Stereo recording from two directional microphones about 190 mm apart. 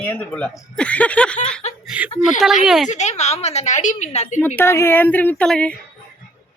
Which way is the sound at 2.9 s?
35° left (ahead or behind).